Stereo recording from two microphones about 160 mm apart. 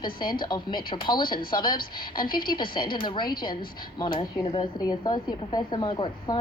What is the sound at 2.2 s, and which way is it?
Speech, 65° left (ahead or behind).